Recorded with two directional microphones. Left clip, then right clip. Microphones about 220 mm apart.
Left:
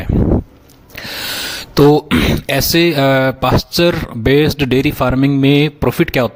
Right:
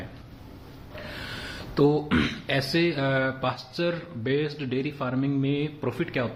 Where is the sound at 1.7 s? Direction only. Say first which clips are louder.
Left 12 dB; 45° left (ahead or behind).